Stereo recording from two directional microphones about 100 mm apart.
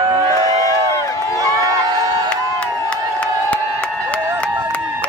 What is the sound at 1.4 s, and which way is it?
Crowd, 35° right (ahead or behind).